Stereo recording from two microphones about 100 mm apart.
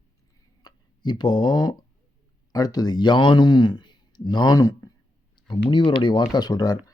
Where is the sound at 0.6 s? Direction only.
45° left (ahead or behind).